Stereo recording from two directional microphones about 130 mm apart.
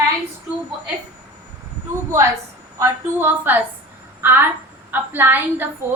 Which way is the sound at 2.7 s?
15° right (ahead or behind).